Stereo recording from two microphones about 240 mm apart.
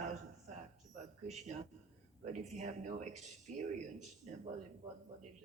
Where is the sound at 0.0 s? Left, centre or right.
Right.